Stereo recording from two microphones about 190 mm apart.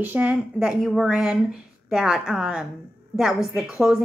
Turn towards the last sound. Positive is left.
turn(degrees=-5)  # may be behind; listen again after turning